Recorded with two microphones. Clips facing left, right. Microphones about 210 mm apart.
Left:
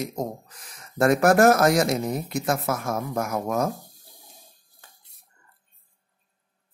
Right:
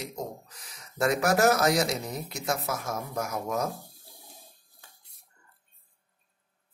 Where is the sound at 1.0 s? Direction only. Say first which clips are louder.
Left 6 dB; 55° left (ahead or behind).